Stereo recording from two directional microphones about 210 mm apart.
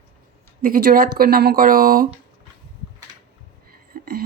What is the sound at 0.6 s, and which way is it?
Speech, 45° right (ahead or behind).